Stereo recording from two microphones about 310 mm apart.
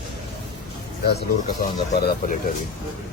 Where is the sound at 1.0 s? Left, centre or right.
Left.